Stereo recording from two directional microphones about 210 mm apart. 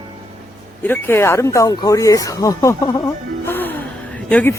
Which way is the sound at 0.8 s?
10° left (ahead or behind).